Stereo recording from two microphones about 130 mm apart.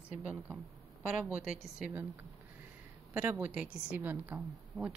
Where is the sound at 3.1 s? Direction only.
15° right (ahead or behind).